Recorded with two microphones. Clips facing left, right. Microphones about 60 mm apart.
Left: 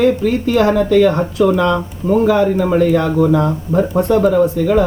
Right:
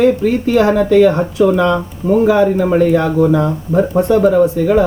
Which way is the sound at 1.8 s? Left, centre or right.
Centre.